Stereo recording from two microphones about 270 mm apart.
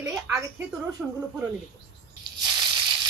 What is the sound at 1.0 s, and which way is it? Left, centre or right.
Speech, centre.